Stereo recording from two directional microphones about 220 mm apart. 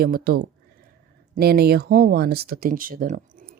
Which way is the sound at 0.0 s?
45° right (ahead or behind).